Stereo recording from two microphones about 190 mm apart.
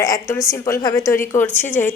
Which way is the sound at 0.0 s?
20° left (ahead or behind).